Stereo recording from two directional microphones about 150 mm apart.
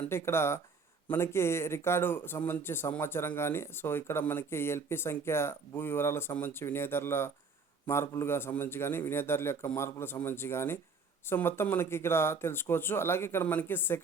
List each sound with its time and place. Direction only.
0.0 s speech: 15° left (ahead or behind)